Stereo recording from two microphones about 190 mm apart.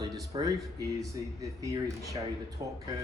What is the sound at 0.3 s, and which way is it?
Speech, 20° right (ahead or behind).